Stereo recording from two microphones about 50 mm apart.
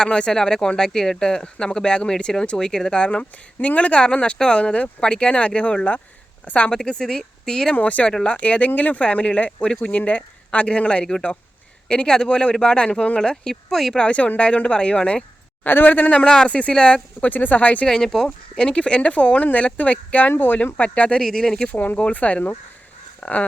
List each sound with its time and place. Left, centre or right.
0.0 s speech: centre
6.7 s speech: centre
7.8 s speech: left
13.3 s speech: centre
13.9 s speech: left
15.6 s speech: left
17.2 s speech: left
17.8 s speech: centre
18.5 s speech: left
21.2 s speech: centre
21.6 s speech: left